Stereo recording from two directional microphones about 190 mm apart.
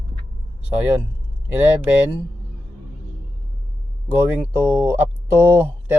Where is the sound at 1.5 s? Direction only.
10° right (ahead or behind).